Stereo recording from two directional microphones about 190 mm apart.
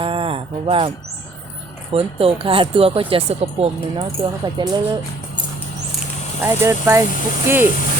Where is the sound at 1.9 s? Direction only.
30° right (ahead or behind).